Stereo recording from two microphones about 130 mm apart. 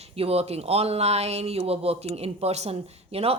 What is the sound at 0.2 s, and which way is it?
Speech, 50° right (ahead or behind).